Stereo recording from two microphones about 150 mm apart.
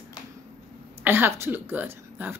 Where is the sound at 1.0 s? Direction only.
15° right (ahead or behind).